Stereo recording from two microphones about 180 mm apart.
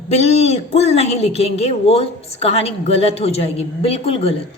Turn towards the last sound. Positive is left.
turn(degrees=35)  # may be behind; listen again after turning